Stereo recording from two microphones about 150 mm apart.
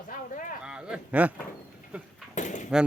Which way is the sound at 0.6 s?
5° right (ahead or behind).